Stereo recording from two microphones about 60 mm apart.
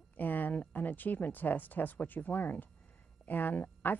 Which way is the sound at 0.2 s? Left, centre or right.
Left.